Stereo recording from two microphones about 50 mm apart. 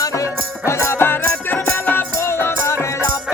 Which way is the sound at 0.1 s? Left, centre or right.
Left.